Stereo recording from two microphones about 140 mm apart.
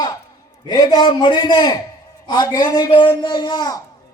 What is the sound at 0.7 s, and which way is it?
Speech, 30° left (ahead or behind).